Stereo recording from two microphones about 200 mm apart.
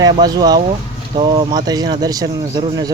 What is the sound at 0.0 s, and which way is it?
Speech, 20° right (ahead or behind).